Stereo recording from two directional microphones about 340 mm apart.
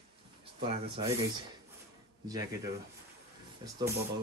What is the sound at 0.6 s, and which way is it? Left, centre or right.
Speech, centre.